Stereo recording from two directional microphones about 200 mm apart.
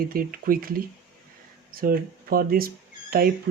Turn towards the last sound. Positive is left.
turn(degrees=-50)  # may be behind; listen again after turning